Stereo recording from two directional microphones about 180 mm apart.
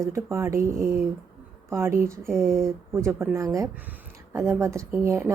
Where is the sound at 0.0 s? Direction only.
15° right (ahead or behind).